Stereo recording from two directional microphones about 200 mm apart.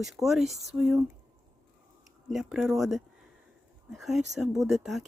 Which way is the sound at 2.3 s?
Centre (ahead or behind).